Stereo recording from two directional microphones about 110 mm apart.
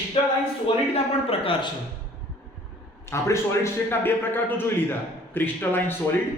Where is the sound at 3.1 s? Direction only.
25° left (ahead or behind).